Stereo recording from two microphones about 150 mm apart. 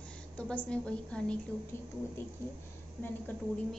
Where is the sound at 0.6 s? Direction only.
5° left (ahead or behind).